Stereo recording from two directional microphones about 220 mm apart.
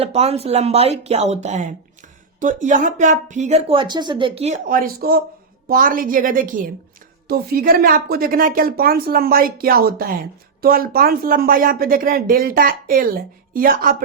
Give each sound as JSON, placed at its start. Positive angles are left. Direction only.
{"t": 0.0, "sound": "a woman's voice", "side_deg": -25}